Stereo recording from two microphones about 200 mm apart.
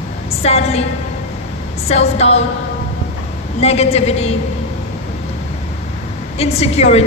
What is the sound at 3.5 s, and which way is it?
Speech, 30° left (ahead or behind).